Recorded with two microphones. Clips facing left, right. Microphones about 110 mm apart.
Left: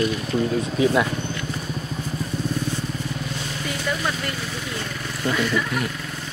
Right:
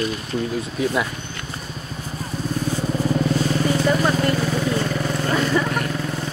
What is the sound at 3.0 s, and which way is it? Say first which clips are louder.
Vehicle: right 10 dB; 40° right (ahead or behind).